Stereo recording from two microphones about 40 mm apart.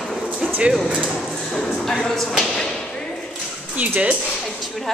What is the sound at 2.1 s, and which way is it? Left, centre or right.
Speech, centre.